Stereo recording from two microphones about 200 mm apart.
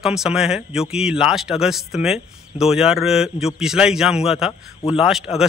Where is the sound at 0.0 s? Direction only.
5° right (ahead or behind).